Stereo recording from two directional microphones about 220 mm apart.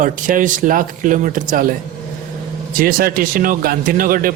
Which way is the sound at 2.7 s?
40° right (ahead or behind).